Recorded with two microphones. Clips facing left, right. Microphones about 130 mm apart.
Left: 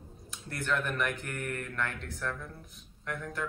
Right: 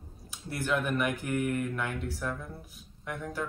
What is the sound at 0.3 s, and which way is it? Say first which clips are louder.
Speech: right 2 dB; 5° right (ahead or behind).